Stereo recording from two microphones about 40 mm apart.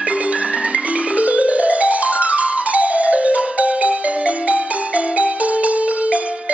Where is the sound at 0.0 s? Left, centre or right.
Right.